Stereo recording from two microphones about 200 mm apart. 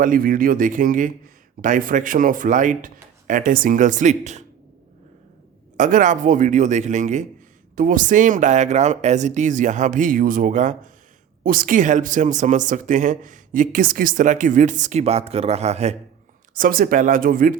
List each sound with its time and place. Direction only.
0.0 s speech: 45° right (ahead or behind)
5.7 s speech: 40° right (ahead or behind)
16.6 s speech: 45° right (ahead or behind)